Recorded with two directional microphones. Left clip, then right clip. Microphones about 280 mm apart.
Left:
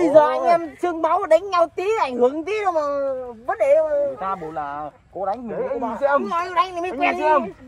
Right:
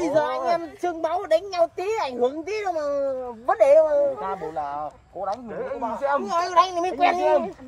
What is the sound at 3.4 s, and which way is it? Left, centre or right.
Speech, right.